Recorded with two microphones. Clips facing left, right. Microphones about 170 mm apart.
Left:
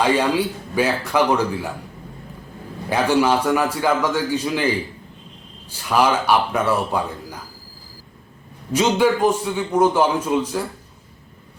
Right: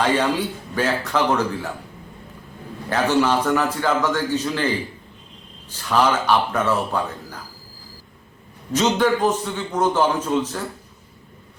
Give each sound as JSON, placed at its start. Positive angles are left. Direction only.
{"t": 0.0, "sound": "a man's voice", "side_deg": 10}
{"t": 2.9, "sound": "a man's voice", "side_deg": 10}
{"t": 5.7, "sound": "a man's voice", "side_deg": 10}
{"t": 8.7, "sound": "a man's voice", "side_deg": 10}